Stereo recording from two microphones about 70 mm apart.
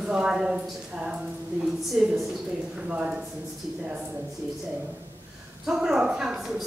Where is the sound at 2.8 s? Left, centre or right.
Centre.